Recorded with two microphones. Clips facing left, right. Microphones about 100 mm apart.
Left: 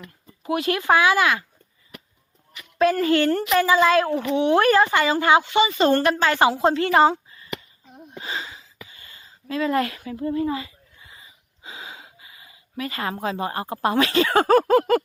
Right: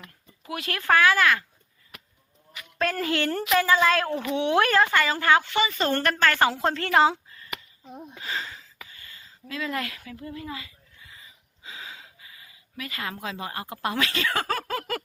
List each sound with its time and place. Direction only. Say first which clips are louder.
0.4 s a woman's voice: left 6 dB; 25° left (ahead or behind)
2.7 s a woman's voice: left 8 dB; 5° left (ahead or behind)
4.9 s a woman's voice: left 3 dB; 15° left (ahead or behind)
8.2 s a sound: left 2 dB; 15° left (ahead or behind)